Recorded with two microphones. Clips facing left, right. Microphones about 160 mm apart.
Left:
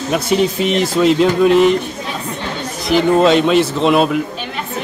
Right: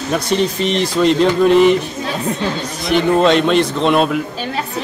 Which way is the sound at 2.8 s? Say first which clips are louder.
Left 1 dB; centre (ahead or behind).